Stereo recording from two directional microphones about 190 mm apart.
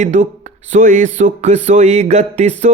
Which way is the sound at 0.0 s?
40° right (ahead or behind).